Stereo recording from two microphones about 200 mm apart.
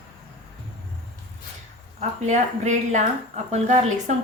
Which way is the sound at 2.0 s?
35° right (ahead or behind).